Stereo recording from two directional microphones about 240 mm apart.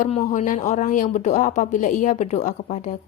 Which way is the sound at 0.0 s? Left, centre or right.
Left.